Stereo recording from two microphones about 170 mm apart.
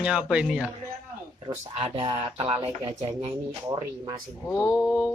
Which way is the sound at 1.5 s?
30° right (ahead or behind).